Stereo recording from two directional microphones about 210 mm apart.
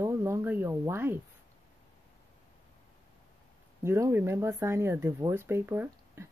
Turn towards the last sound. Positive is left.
turn(degrees=-10)  # may be behind; listen again after turning